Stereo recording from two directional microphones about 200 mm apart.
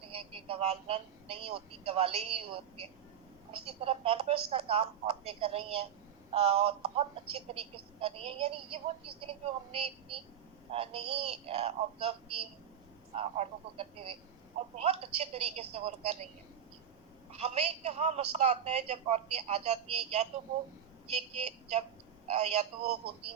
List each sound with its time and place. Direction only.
0.1 s a woman's voice: 30° right (ahead or behind)
17.3 s a woman's voice: 30° right (ahead or behind)